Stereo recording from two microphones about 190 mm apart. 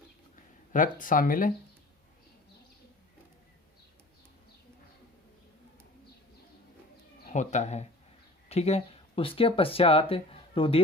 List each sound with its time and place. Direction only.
0.7 s speech: 45° left (ahead or behind)
7.3 s speech: 35° left (ahead or behind)